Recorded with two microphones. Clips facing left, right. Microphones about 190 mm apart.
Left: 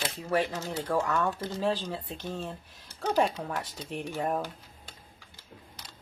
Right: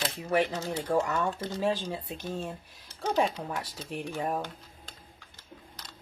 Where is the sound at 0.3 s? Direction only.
15° right (ahead or behind).